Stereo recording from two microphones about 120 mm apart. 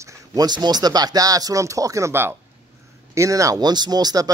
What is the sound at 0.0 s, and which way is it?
Speech, 35° right (ahead or behind).